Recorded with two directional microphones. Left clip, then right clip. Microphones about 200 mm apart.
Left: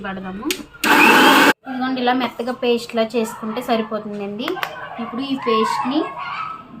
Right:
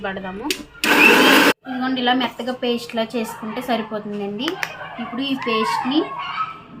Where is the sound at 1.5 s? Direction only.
10° left (ahead or behind).